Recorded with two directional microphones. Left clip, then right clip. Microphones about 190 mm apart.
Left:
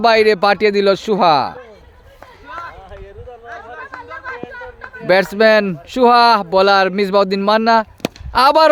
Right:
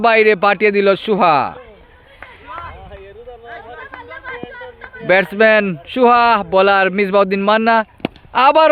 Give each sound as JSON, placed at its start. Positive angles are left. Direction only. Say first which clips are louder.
{"t": 0.0, "sound": "speech", "louder": "even", "side_deg": 15}
{"t": 2.5, "sound": "run", "louder": "left 1 dB", "side_deg": -30}
{"t": 3.4, "sound": "chatter", "louder": "left 2 dB", "side_deg": -35}
{"t": 5.0, "sound": "speech", "louder": "even", "side_deg": 15}